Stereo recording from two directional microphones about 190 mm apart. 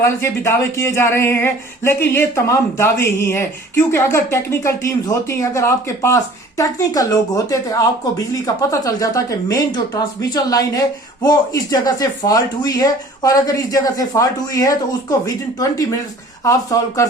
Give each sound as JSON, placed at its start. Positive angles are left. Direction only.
{"t": 0.2, "sound": "speech", "side_deg": 15}